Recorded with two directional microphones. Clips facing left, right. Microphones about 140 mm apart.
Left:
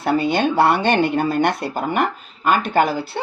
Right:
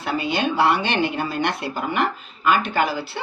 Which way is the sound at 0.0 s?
50° left (ahead or behind).